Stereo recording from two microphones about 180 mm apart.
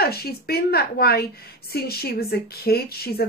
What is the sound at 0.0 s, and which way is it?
A woman's voice, 60° left (ahead or behind).